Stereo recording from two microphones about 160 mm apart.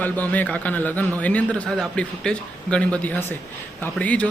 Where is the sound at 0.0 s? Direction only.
10° left (ahead or behind).